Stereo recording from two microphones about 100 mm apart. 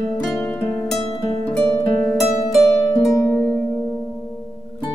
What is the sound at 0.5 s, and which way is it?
Music, 25° left (ahead or behind).